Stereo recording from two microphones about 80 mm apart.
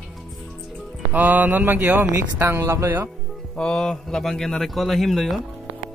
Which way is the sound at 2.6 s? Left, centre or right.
Right.